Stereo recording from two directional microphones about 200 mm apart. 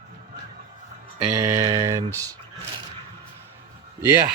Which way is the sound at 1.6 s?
15° right (ahead or behind).